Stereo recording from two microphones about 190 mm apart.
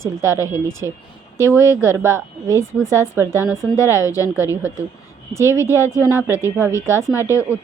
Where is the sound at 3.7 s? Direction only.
15° left (ahead or behind).